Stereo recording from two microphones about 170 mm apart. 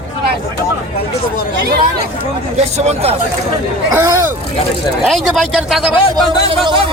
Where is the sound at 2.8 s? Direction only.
40° right (ahead or behind).